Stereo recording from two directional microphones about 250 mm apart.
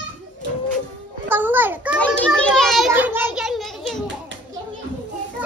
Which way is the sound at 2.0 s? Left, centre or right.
Centre.